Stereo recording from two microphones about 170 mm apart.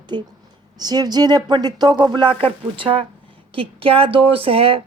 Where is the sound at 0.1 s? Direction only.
25° right (ahead or behind).